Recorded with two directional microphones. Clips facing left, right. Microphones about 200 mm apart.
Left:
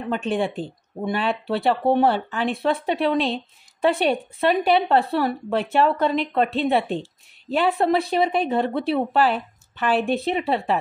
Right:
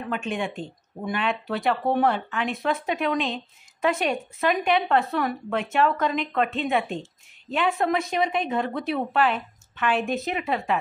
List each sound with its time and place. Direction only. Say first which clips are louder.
0.1 s a woman's voice: left 6 dB; 35° left (ahead or behind)